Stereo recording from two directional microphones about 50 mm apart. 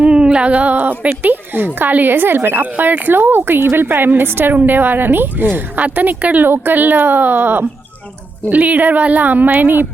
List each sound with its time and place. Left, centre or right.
0.0 s a woman's voice: centre; by 9.8 s right